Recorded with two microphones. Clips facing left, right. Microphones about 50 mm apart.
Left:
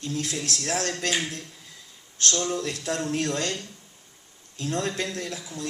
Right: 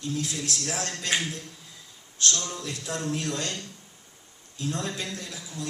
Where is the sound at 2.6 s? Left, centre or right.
Left.